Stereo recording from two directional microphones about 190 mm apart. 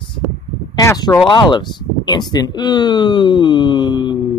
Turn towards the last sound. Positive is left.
turn(degrees=25)  # may be behind; listen again after turning